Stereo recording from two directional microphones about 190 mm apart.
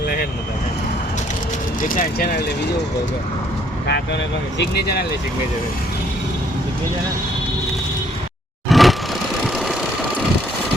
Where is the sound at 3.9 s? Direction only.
65° left (ahead or behind).